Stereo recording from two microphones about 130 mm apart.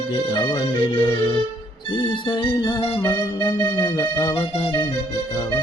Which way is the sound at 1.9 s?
35° left (ahead or behind).